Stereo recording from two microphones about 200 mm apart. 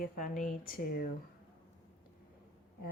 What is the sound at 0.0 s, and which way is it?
Speech, 40° left (ahead or behind).